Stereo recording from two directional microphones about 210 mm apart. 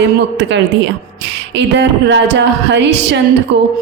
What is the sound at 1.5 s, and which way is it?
A woman's voice, 55° right (ahead or behind).